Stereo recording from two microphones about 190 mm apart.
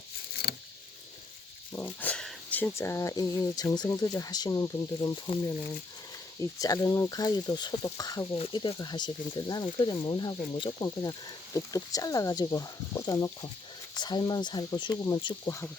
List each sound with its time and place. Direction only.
0.4 s vehicle: 55° left (ahead or behind)
1.7 s speech: 10° left (ahead or behind)
6.6 s speech: 20° left (ahead or behind)